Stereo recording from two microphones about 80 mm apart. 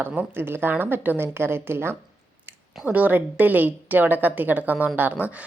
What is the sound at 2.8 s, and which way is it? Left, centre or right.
A woman's voice, centre.